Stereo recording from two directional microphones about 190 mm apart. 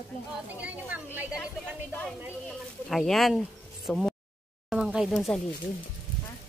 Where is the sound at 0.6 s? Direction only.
10° right (ahead or behind).